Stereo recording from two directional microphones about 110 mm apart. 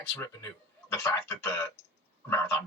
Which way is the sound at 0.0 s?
20° left (ahead or behind).